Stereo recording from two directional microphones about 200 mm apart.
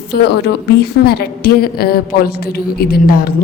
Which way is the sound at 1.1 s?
50° left (ahead or behind).